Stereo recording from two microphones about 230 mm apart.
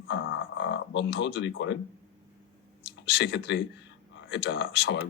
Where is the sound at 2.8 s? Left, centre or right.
Left.